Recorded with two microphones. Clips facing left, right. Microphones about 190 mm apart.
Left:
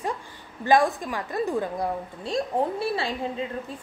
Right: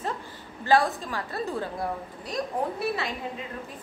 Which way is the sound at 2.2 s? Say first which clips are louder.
Left 4 dB; 30° left (ahead or behind).